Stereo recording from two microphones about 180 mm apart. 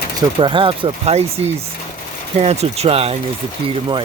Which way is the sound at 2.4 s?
35° right (ahead or behind).